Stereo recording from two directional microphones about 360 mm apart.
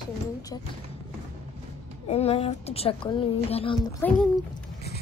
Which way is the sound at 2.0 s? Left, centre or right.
Centre.